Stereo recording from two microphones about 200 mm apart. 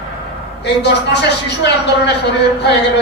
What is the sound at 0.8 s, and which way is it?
Speech, 60° left (ahead or behind).